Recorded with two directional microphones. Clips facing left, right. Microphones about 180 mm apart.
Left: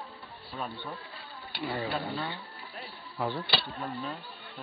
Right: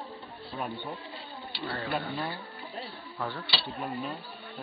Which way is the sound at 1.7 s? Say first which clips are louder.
Even; 15° left (ahead or behind).